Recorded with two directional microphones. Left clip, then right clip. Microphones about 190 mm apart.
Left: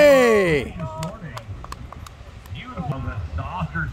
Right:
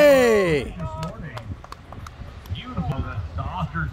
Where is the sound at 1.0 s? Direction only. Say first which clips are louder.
Left 1 dB; 55° left (ahead or behind).